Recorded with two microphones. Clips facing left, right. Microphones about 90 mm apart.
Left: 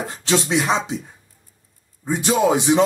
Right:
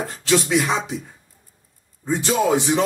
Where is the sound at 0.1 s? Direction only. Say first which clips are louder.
Right 1 dB; 25° left (ahead or behind).